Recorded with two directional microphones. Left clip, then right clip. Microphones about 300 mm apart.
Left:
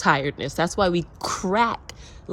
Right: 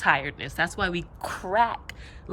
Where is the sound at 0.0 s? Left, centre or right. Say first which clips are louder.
Left 2 dB; centre.